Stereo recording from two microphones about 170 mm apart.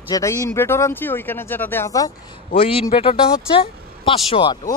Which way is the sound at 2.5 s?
30° left (ahead or behind).